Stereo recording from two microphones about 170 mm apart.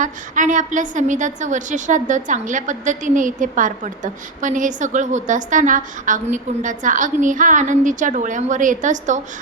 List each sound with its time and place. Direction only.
0.0 s a woman's voice: 50° right (ahead or behind)